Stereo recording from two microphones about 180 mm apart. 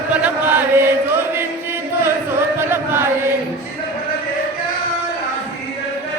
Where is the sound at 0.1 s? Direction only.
10° right (ahead or behind).